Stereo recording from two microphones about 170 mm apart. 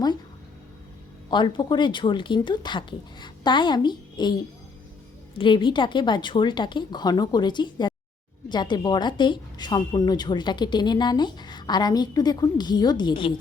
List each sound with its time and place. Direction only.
1.3 s speech: 25° left (ahead or behind)
5.4 s speech: 30° left (ahead or behind)